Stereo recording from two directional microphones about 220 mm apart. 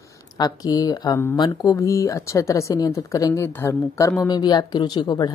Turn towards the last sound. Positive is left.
turn(degrees=20)  # may be behind; listen again after turning